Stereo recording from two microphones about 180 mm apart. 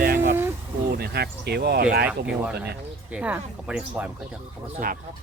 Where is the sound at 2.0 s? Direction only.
5° right (ahead or behind).